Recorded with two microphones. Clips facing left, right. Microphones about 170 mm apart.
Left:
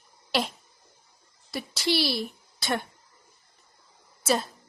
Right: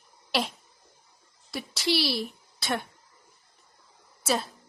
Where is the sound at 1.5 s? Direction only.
Centre (ahead or behind).